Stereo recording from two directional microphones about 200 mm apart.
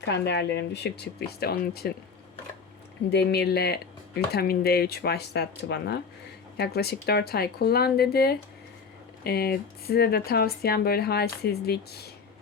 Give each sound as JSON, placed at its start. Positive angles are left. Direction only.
{"t": 0.0, "sound": "speech", "side_deg": 60}
{"t": 3.1, "sound": "speech", "side_deg": 55}